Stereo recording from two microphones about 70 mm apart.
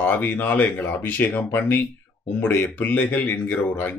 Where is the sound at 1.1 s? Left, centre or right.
Left.